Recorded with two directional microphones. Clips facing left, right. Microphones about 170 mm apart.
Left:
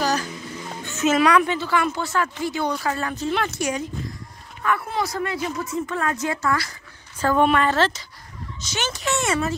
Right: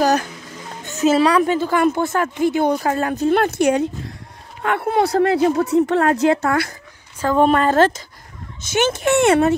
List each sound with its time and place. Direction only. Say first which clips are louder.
0.0 s a sound: right 6 dB; 50° right (ahead or behind)
0.8 s a woman's voice: right 4 dB; 35° right (ahead or behind); by 6.7 s 60° right (ahead or behind)
7.3 s speech: right 5 dB; 40° right (ahead or behind); by 9.6 s 60° right (ahead or behind)